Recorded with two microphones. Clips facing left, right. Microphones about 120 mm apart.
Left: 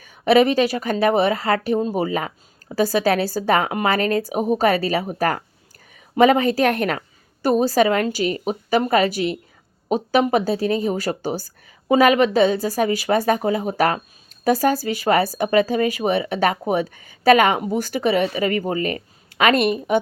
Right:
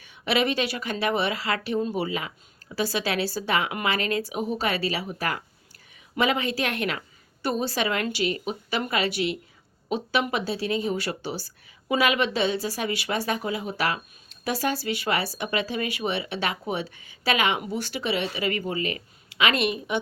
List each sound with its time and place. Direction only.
0.0 s a woman's voice: 45° left (ahead or behind)